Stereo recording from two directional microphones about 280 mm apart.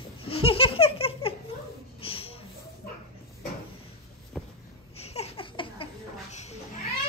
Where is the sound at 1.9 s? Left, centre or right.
Centre.